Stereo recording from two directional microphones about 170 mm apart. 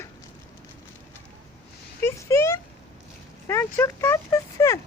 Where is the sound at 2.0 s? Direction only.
15° left (ahead or behind).